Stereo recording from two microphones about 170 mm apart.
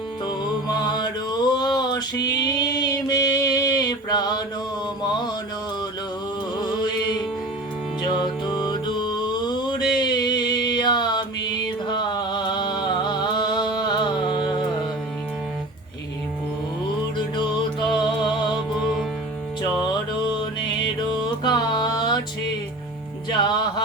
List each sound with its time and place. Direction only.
0.3 s music: 25° left (ahead or behind)
2.3 s a sound: 25° left (ahead or behind)
8.0 s music: 25° left (ahead or behind)
17.2 s music: 25° left (ahead or behind)
20.4 s music: 25° left (ahead or behind)
23.4 s music: 25° left (ahead or behind)